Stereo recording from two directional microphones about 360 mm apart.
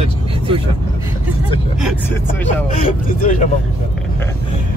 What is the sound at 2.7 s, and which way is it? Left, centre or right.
Speech, centre.